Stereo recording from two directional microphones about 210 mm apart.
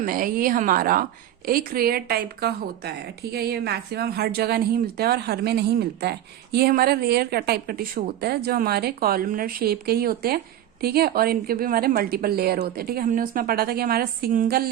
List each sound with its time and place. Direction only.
0.0 s a woman's voice: 40° right (ahead or behind)